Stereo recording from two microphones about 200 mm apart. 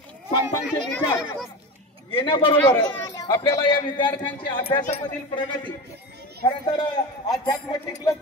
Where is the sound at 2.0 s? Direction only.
25° left (ahead or behind).